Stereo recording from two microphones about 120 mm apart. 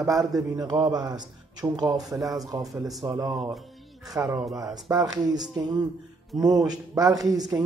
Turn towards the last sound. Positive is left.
turn(degrees=-30)  # may be behind; listen again after turning